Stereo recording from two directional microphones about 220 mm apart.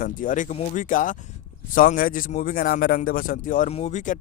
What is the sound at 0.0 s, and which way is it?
A man's voice, 35° left (ahead or behind).